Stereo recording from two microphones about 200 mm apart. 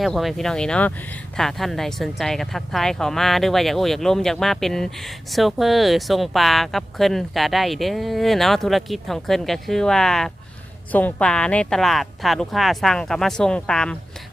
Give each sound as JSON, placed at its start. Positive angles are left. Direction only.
{"t": 0.0, "sound": "speech", "side_deg": 0}